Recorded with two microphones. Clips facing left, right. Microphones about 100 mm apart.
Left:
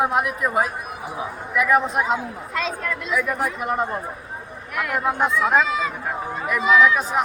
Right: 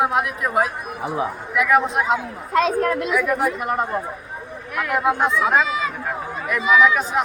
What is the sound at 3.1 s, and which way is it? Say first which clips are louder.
A man's voice: right 3 dB; centre (ahead or behind).